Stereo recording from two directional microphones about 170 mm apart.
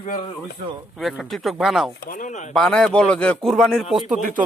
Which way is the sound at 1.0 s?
Centre (ahead or behind).